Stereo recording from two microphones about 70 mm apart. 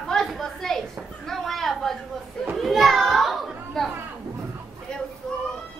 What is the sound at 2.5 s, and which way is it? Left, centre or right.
Children playing, centre.